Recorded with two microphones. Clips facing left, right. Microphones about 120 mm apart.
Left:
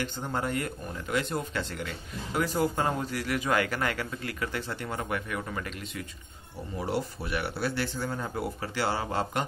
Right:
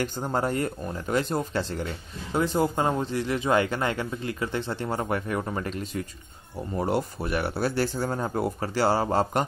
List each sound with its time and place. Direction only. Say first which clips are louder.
0.0 s speech: right 5 dB; 40° right (ahead or behind)
6.8 s speech: right 5 dB; 45° right (ahead or behind)